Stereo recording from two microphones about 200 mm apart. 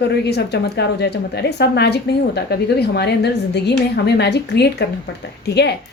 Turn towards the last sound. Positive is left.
turn(degrees=55)  # may be behind; listen again after turning